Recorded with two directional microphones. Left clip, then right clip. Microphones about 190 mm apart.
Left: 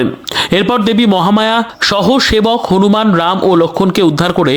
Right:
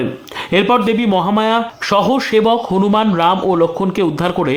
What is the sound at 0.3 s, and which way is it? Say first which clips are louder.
Speech: left 1 dB; 30° left (ahead or behind).